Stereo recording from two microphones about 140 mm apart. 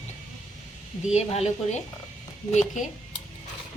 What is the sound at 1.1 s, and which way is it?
A woman's voice, 50° left (ahead or behind).